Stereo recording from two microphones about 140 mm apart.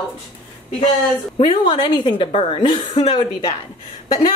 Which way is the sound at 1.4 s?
35° left (ahead or behind).